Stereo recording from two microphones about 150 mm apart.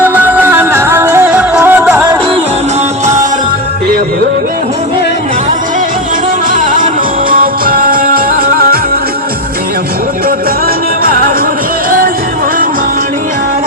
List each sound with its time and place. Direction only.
0.0 s music: 10° right (ahead or behind)
6.5 s music: 65° right (ahead or behind)